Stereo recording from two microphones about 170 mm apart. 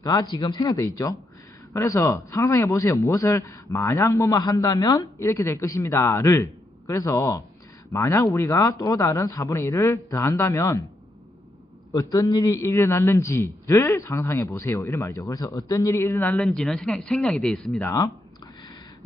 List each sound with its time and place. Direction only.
0.0 s a man's voice: 20° left (ahead or behind)
11.9 s a man's voice: 20° left (ahead or behind)